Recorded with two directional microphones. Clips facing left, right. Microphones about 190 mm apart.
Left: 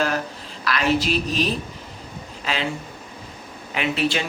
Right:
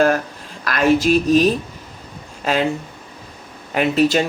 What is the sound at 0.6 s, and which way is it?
A woman's voice, 45° right (ahead or behind).